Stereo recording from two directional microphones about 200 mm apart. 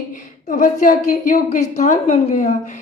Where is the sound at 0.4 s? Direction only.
40° left (ahead or behind).